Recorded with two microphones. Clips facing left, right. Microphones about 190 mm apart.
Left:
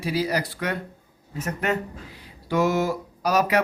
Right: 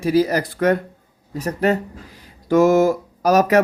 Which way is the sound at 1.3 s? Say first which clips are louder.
Right 7 dB; 35° right (ahead or behind).